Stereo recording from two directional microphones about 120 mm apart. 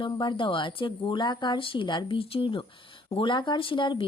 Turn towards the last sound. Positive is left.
turn(degrees=45)  # may be behind; listen again after turning